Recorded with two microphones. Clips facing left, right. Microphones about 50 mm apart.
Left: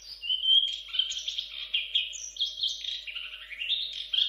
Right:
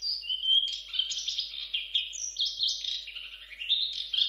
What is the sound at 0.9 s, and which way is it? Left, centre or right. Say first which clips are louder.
Bird: left 1 dB; left.